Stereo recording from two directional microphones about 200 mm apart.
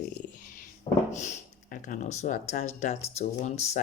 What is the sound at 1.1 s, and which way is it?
Speech, 35° left (ahead or behind).